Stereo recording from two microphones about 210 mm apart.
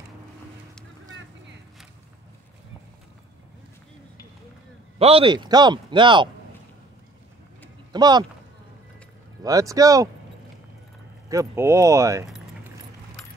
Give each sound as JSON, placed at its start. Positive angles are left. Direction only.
{"t": 4.9, "sound": "speech", "side_deg": -25}
{"t": 7.9, "sound": "speech", "side_deg": -20}
{"t": 9.4, "sound": "speech", "side_deg": -15}
{"t": 11.2, "sound": "speech", "side_deg": -15}